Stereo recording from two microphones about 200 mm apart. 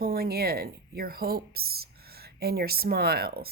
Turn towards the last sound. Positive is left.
turn(degrees=-50)  # may be behind; listen again after turning